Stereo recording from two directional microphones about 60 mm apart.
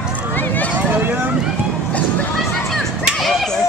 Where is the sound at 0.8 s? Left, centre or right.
Right.